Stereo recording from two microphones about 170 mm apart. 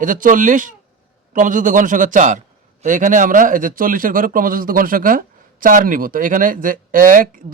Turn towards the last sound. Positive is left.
turn(degrees=-55)  # may be behind; listen again after turning